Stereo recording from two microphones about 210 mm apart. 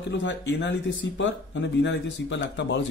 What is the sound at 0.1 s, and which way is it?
Speech, 55° left (ahead or behind).